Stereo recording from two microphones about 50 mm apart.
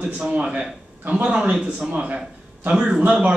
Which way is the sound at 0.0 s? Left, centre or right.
Right.